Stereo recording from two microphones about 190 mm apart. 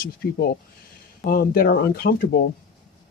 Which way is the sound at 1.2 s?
50° left (ahead or behind).